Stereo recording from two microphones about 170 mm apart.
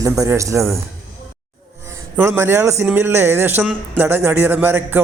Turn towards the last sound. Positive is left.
turn(degrees=-10)  # may be behind; listen again after turning